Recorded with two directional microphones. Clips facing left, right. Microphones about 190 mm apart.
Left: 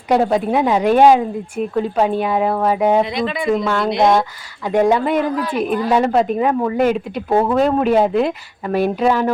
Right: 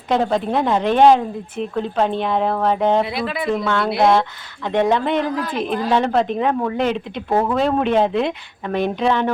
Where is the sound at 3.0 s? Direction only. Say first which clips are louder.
Left 3 dB; 5° right (ahead or behind).